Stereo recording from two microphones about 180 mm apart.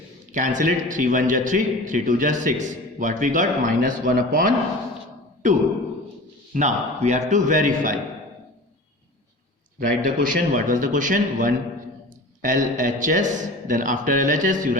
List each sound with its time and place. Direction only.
0.3 s a man's voice: 45° right (ahead or behind)
9.8 s a man's voice: 50° right (ahead or behind)